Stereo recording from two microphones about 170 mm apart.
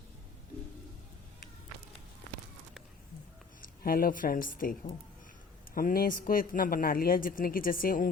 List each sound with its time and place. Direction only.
3.6 s speech: 60° left (ahead or behind)